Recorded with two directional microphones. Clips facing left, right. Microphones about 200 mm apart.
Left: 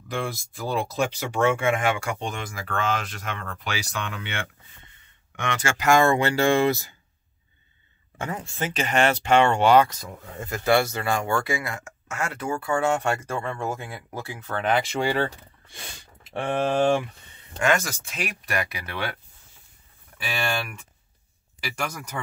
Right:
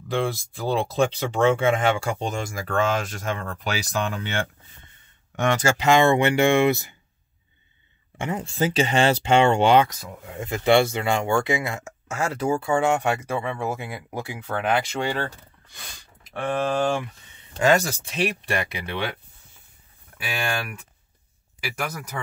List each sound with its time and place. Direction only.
0.1 s speech: 30° right (ahead or behind)
5.8 s speech: 20° right (ahead or behind)
8.5 s speech: 30° right (ahead or behind)
9.9 s speech: 10° right (ahead or behind)
10.5 s speech: 20° right (ahead or behind)
14.7 s speech: centre (ahead or behind)
16.3 s speech: 25° left (ahead or behind)
17.6 s speech: 35° right (ahead or behind)
21.5 s speech: 5° right (ahead or behind)